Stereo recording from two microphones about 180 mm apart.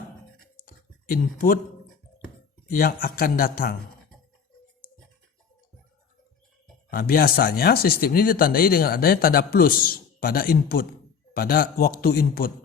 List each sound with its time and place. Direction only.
1.1 s speech: 50° left (ahead or behind)
2.6 s speech: 55° left (ahead or behind)
6.9 s speech: 55° left (ahead or behind)